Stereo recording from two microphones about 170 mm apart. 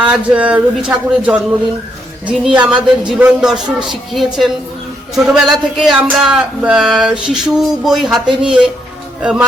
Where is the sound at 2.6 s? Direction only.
5° right (ahead or behind).